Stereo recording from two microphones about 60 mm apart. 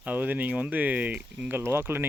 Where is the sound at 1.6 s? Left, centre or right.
Right.